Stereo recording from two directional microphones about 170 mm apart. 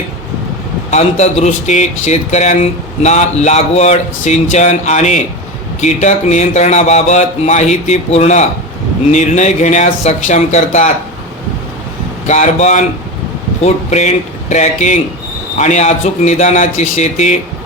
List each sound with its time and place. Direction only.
0.9 s a man's voice: 40° left (ahead or behind)
12.3 s a man's voice: 45° left (ahead or behind)